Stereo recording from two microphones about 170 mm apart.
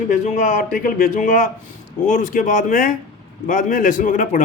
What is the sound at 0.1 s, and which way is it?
A man's voice, 45° left (ahead or behind).